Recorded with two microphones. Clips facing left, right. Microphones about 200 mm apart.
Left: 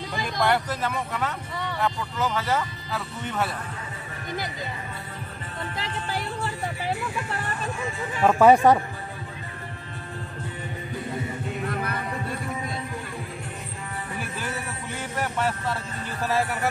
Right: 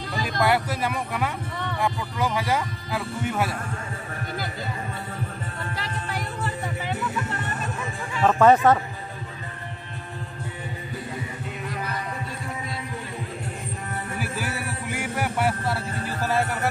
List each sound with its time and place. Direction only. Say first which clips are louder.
0.2 s speech: right 1 dB; 5° right (ahead or behind)
5.8 s music: left 2 dB; 25° left (ahead or behind)
8.2 s speech: left 1 dB; 10° left (ahead or behind)
11.6 s music: left 1 dB; 55° left (ahead or behind)
14.2 s music: right 3 dB; 10° right (ahead or behind)